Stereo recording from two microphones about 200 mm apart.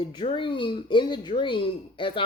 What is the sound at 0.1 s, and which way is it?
A woman's voice, 25° left (ahead or behind).